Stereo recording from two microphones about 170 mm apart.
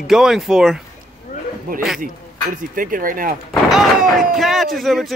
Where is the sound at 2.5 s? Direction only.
55° right (ahead or behind).